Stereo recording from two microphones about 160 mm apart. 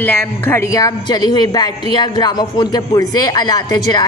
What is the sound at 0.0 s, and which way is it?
A man's voice, 10° left (ahead or behind).